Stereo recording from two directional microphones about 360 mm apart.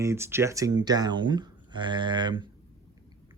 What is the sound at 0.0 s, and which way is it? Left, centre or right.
Speech, centre.